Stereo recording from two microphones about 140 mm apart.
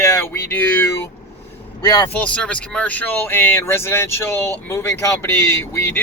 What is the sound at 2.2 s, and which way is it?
Speech, 10° left (ahead or behind).